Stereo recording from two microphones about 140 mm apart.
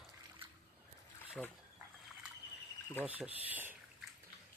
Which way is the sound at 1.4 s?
5° left (ahead or behind).